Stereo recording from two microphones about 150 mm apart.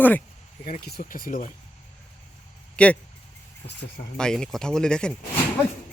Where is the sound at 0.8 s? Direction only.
80° left; by 1.5 s 60° left (ahead or behind).